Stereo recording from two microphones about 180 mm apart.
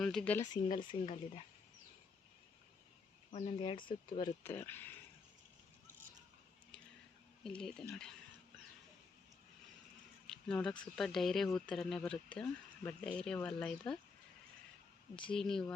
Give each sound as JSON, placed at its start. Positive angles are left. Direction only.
{"t": 0.0, "sound": "speech", "side_deg": 5}
{"t": 0.4, "sound": "speech", "side_deg": 25}
{"t": 3.3, "sound": "speech", "side_deg": 30}
{"t": 4.4, "sound": "speech", "side_deg": 10}
{"t": 7.4, "sound": "speech", "side_deg": 5}
{"t": 10.2, "sound": "speech", "side_deg": 5}
{"t": 15.3, "sound": "speech", "side_deg": 5}